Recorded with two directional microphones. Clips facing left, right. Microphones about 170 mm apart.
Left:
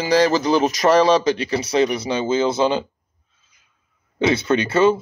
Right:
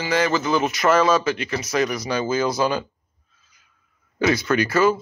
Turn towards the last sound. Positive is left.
turn(degrees=25)  # may be behind; listen again after turning